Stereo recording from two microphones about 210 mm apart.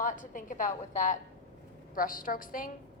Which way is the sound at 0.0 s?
40° left (ahead or behind).